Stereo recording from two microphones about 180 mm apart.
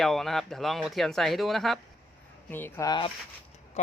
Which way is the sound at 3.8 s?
40° left (ahead or behind).